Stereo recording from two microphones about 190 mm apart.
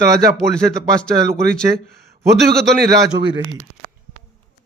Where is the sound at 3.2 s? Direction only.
20° right (ahead or behind).